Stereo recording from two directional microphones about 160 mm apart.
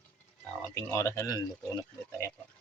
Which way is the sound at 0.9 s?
20° left (ahead or behind).